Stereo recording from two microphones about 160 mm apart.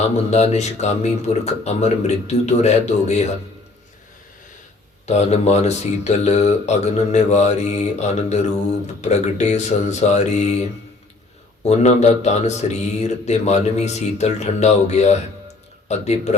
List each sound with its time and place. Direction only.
0.0 s speech: 45° left (ahead or behind)
5.0 s speech: 40° left (ahead or behind)
11.6 s speech: 45° left (ahead or behind)